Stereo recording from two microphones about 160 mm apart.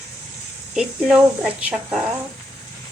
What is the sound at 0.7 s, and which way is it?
Speech, 5° right (ahead or behind).